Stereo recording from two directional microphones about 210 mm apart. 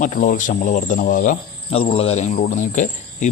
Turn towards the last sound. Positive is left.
turn(degrees=35)  # may be behind; listen again after turning